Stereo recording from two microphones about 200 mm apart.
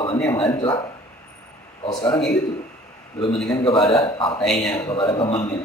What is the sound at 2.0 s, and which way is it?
A woman's voice, 5° left (ahead or behind).